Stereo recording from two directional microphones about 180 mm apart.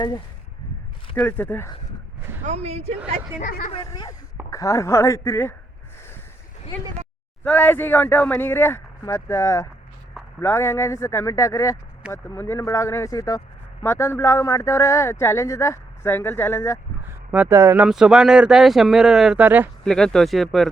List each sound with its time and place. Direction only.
1.1 s speech: 10° left (ahead or behind)
2.4 s speech: 35° right (ahead or behind)
3.4 s speech: 45° left (ahead or behind)
3.8 s a woman's voice: 25° left (ahead or behind)
7.4 s speech: 10° left (ahead or behind)
17.3 s speech: 10° right (ahead or behind)
17.8 s speech: 5° right (ahead or behind)
19.8 s speech: 5° left (ahead or behind)